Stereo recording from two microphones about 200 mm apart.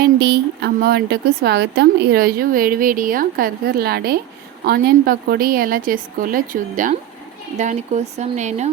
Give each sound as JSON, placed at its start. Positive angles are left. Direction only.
{"t": 0.0, "sound": "a woman's voice", "side_deg": -55}